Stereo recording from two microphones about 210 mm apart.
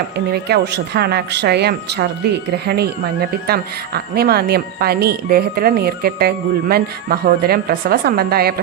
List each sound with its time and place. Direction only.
0.3 s a woman's voice: 50° right (ahead or behind)